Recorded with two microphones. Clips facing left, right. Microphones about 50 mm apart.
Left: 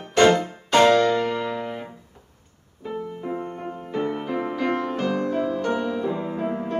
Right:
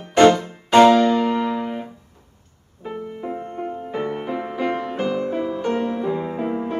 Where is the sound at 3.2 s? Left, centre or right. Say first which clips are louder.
Right 5 dB; centre.